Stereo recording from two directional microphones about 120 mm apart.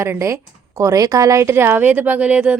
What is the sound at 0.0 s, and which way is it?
A woman's voice, 25° right (ahead or behind).